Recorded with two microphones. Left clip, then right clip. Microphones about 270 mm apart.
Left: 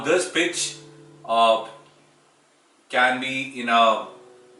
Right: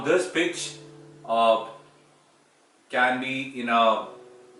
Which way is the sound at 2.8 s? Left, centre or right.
Centre.